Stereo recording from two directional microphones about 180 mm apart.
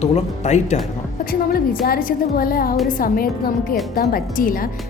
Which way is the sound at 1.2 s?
55° left (ahead or behind).